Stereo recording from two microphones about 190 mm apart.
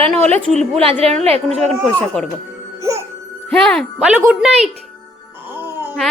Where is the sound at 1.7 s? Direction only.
Centre (ahead or behind).